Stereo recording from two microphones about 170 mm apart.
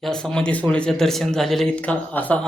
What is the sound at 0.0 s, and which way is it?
A man's voice, 5° left (ahead or behind).